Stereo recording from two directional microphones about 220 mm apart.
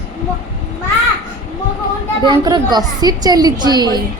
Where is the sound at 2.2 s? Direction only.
20° right (ahead or behind).